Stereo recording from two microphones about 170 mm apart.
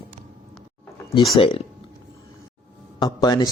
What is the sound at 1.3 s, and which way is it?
Speech, 30° left (ahead or behind).